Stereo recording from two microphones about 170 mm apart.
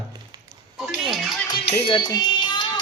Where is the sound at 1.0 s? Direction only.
Centre (ahead or behind).